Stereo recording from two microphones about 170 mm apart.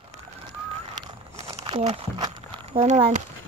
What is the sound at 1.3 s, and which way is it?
Crumpling, 40° right (ahead or behind).